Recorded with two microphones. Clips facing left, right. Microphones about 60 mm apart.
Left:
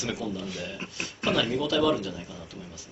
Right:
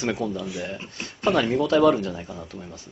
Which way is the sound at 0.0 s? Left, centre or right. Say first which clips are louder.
Right 5 dB; right.